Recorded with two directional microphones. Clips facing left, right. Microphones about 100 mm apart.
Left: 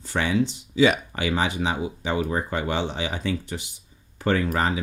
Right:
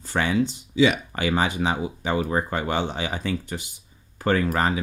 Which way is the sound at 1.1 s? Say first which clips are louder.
Right 1 dB; 45° right (ahead or behind).